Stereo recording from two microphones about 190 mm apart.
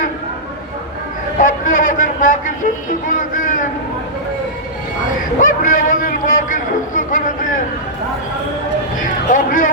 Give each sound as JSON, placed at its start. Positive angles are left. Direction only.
{"t": 1.4, "sound": "a sound", "side_deg": 45}
{"t": 2.9, "sound": "a man's voice", "side_deg": 45}
{"t": 5.4, "sound": "a man's voice", "side_deg": 45}
{"t": 9.0, "sound": "a man's voice", "side_deg": 45}